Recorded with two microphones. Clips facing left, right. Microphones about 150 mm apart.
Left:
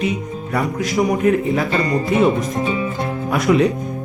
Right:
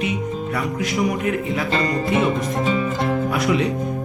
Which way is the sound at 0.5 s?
40° left (ahead or behind).